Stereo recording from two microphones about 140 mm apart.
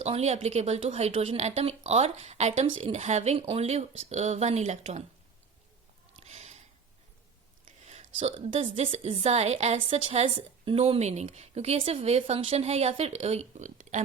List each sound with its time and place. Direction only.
0.0 s a woman's voice: 50° right (ahead or behind)
6.1 s a sound: 50° right (ahead or behind)
7.9 s a woman's voice: 50° right (ahead or behind)